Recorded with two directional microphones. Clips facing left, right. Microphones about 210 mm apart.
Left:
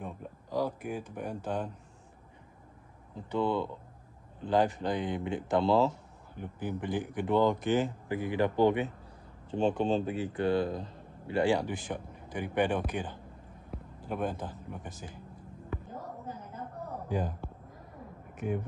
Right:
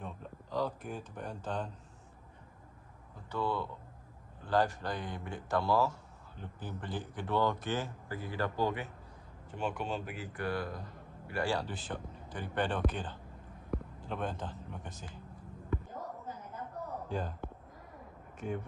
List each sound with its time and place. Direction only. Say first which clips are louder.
0.0 s speech: left 3 dB; 10° left (ahead or behind)
3.2 s speech: left 5 dB; 20° left (ahead or behind)
17.1 s speech: left 5 dB; 15° left (ahead or behind)
18.4 s speech: left 4 dB; 10° left (ahead or behind)